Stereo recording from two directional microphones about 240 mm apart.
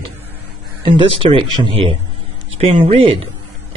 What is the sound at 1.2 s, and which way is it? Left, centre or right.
Speech, right.